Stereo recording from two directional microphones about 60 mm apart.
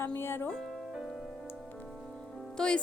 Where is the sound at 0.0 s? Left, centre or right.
Left.